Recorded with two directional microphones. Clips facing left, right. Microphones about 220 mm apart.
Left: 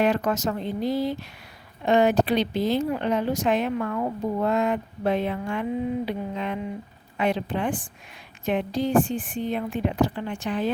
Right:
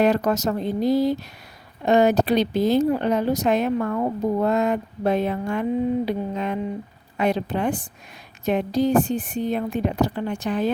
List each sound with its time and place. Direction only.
0.0 s speech: 40° right (ahead or behind)
6.1 s mantra: 45° right (ahead or behind)
7.2 s speech: 40° right (ahead or behind)